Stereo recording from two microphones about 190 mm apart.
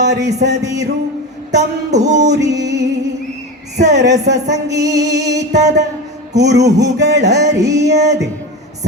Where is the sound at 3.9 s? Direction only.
65° right (ahead or behind).